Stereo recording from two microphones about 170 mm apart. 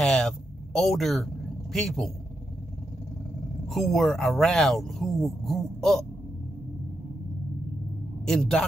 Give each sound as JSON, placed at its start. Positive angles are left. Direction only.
{"t": 0.0, "sound": "a sound", "side_deg": 0}
{"t": 0.7, "sound": "a man's voice", "side_deg": 0}
{"t": 3.6, "sound": "speech", "side_deg": 0}
{"t": 8.3, "sound": "speech", "side_deg": 0}